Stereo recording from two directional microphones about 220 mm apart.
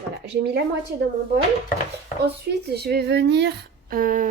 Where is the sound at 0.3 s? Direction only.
50° right (ahead or behind).